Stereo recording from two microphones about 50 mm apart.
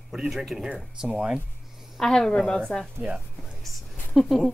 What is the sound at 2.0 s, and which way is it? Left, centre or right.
Speech, centre.